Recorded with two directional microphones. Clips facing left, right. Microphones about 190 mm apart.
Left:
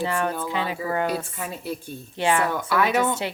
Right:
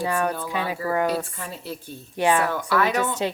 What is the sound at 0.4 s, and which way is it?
Speech, 20° left (ahead or behind).